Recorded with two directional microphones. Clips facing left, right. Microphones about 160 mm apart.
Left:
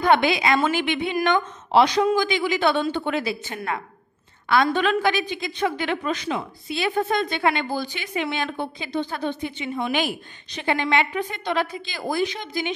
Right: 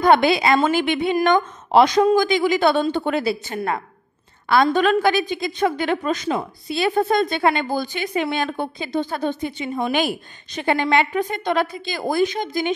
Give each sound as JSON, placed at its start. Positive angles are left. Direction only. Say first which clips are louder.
{"t": 0.0, "sound": "a woman's voice", "louder": "right 4 dB", "side_deg": -40}